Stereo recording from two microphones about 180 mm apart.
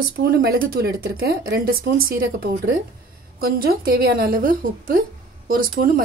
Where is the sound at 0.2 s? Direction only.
60° right (ahead or behind).